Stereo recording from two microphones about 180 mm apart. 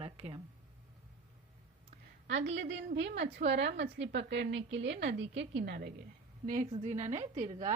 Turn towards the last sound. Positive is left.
turn(degrees=-40)  # may be behind; listen again after turning